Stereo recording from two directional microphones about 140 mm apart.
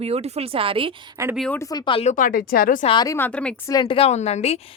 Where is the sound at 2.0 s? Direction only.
65° left (ahead or behind); by 2.9 s 80° left.